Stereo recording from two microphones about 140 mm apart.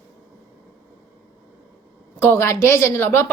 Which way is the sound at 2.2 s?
20° left (ahead or behind).